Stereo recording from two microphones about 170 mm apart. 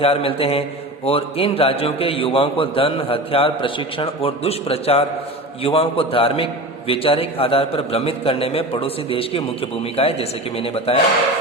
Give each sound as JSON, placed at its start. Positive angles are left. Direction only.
{"t": 0.0, "sound": "a man's voice", "side_deg": 35}